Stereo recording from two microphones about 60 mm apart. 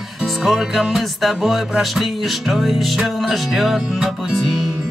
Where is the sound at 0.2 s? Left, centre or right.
Centre.